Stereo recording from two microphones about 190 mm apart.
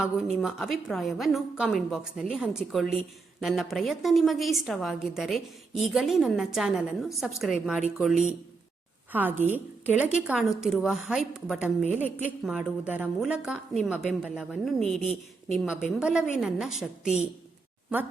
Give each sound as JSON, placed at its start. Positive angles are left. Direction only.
{"t": 0.0, "sound": "a woman's voice", "side_deg": 0}
{"t": 9.1, "sound": "a woman's voice", "side_deg": -10}